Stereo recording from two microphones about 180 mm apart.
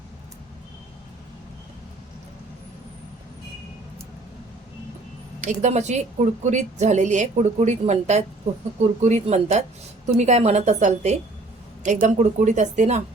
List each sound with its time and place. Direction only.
5.5 s a woman's voice: 40° right (ahead or behind)